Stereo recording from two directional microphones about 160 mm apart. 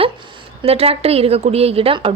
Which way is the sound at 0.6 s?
40° right (ahead or behind).